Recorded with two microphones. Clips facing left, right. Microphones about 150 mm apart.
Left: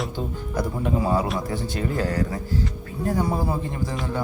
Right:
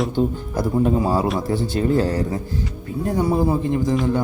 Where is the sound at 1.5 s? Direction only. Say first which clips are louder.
Right 7 dB; 30° right (ahead or behind).